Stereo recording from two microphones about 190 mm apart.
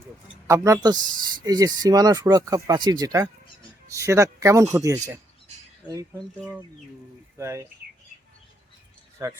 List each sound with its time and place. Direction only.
0.4 s speech: 15° right (ahead or behind)
6.1 s speech: centre (ahead or behind)
7.3 s speech: 15° right (ahead or behind)
9.2 s speech: 15° right (ahead or behind)